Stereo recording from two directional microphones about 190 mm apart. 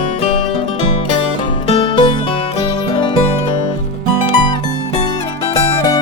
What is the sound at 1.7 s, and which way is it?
Music, 25° left (ahead or behind).